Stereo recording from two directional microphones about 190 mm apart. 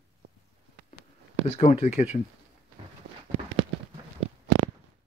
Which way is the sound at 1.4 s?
30° left (ahead or behind).